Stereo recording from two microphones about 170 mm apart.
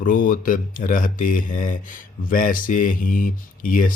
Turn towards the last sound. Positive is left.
turn(degrees=55)  # may be behind; listen again after turning